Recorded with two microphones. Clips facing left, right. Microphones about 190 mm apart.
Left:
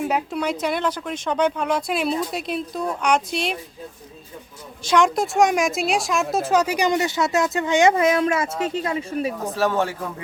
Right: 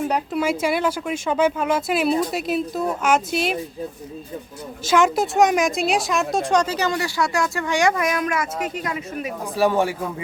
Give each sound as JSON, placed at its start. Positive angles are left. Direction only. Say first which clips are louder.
{"t": 0.1, "sound": "speech", "louder": "right 2 dB", "side_deg": -5}
{"t": 4.9, "sound": "a woman's voice", "louder": "right 1 dB", "side_deg": -5}
{"t": 9.6, "sound": "speech", "louder": "right 4 dB", "side_deg": -15}